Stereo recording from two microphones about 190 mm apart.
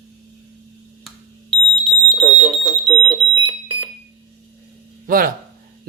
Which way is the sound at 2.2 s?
15° right (ahead or behind).